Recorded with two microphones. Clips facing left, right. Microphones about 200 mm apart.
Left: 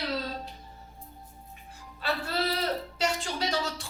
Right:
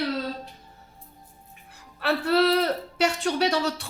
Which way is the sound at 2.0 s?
65° right (ahead or behind).